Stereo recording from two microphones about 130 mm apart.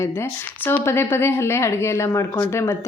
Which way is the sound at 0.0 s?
20° left (ahead or behind).